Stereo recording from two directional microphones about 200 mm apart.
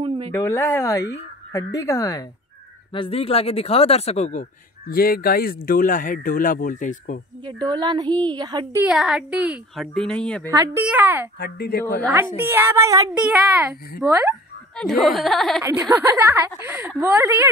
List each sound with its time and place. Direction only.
0.3 s speech: 10° left (ahead or behind)
2.9 s speech: 30° left (ahead or behind)
7.4 s speech: 20° right (ahead or behind)
8.8 s a woman's voice: 5° right (ahead or behind)
10.5 s a woman's voice: 15° right (ahead or behind)
11.3 s speech: 50° left (ahead or behind)
12.4 s a woman's voice: 10° right (ahead or behind)
14.8 s a woman's voice: centre (ahead or behind)
15.6 s a woman's voice: 10° right (ahead or behind)